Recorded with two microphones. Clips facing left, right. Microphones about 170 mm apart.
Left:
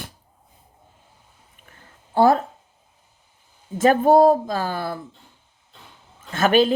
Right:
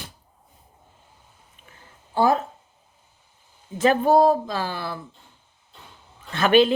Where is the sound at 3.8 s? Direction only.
45° left (ahead or behind).